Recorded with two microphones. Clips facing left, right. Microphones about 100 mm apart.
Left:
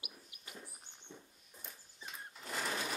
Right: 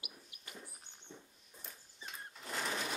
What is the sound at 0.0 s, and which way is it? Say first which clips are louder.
Bird: even; centre (ahead or behind).